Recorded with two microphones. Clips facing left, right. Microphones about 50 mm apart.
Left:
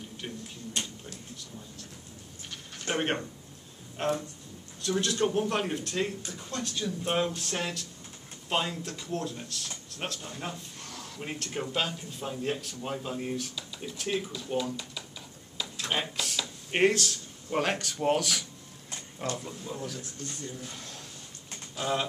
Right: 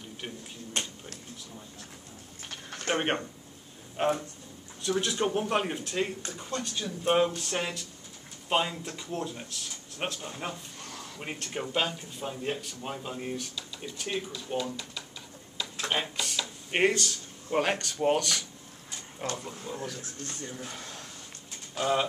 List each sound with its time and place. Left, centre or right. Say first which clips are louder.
2.9 s a man's voice: right 1 dB; centre
20.0 s speech: even; right
20.7 s speech: right 2 dB; centre